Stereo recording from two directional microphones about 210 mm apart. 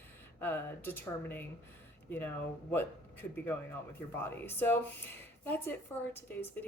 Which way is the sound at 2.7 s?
10° left (ahead or behind).